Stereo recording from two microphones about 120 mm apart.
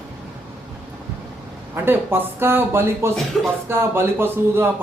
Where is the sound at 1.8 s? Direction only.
20° right (ahead or behind).